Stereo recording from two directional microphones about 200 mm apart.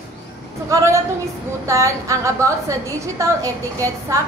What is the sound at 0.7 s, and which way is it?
A woman's voice, 15° right (ahead or behind).